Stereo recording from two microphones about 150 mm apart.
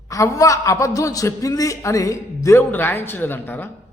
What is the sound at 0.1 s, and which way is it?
Speech, 20° left (ahead or behind).